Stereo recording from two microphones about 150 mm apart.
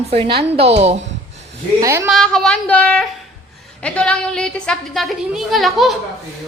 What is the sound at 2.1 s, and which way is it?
A woman's voice, 5° left (ahead or behind).